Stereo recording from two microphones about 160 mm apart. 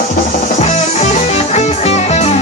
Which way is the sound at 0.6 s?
45° left (ahead or behind).